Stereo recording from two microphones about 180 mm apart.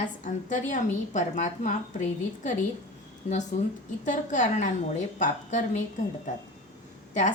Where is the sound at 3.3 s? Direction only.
40° left (ahead or behind).